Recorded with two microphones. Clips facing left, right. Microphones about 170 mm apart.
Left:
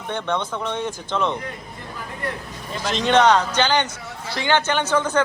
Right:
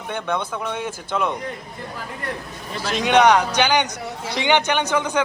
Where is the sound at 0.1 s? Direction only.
10° right (ahead or behind).